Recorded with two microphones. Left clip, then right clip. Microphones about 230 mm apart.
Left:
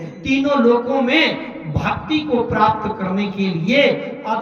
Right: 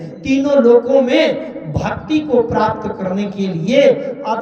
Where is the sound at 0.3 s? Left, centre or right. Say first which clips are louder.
Right 4 dB; left.